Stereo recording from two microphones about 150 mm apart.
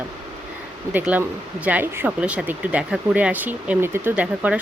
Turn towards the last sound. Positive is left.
turn(degrees=-10)  # may be behind; listen again after turning